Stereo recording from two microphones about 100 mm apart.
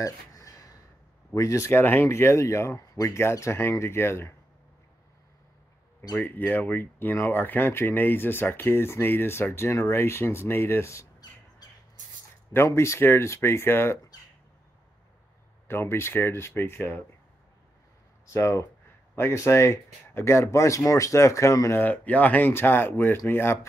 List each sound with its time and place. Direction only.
0.0 s a sound: 35° left (ahead or behind)
1.3 s speech: 30° left (ahead or behind)
6.1 s speech: 20° left (ahead or behind)
12.5 s speech: 25° left (ahead or behind)
15.7 s speech: 25° left (ahead or behind)
18.3 s speech: 25° left (ahead or behind)
21.8 s speech: 15° left (ahead or behind)